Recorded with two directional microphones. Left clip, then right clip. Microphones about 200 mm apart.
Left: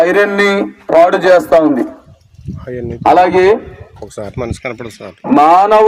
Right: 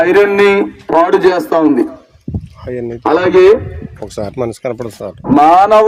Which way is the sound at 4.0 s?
30° right (ahead or behind).